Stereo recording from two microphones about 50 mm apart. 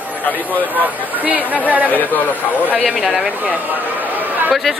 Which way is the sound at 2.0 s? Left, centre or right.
Left.